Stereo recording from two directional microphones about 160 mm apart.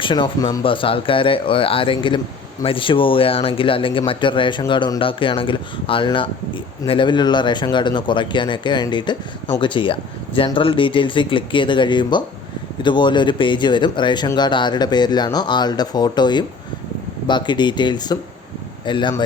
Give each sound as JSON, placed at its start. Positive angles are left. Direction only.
{"t": 0.0, "sound": "speech", "side_deg": 30}